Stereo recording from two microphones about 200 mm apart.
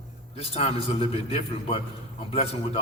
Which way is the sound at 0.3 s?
30° left (ahead or behind).